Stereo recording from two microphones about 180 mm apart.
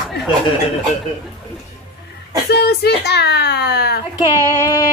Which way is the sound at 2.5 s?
65° left (ahead or behind).